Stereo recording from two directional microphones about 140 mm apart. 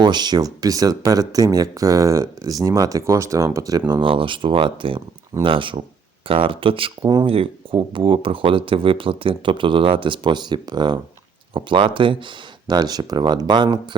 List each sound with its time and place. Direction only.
0.0 s speech: 30° right (ahead or behind)